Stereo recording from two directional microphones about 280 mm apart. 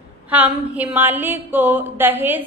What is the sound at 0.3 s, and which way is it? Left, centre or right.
A woman's voice, centre.